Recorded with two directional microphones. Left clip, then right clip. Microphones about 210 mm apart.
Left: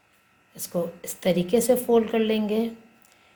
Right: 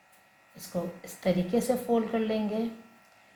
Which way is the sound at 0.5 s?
55° left (ahead or behind).